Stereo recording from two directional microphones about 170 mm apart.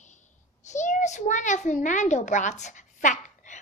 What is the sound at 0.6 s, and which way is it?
A child's voice, 45° left (ahead or behind).